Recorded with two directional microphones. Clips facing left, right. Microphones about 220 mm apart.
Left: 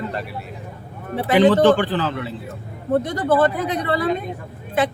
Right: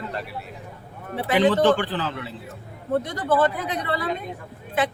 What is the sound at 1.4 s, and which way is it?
Speech, 90° left.